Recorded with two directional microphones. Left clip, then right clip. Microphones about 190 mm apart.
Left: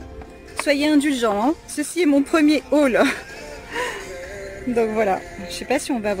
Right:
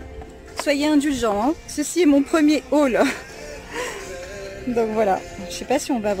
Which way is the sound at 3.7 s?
Centre (ahead or behind).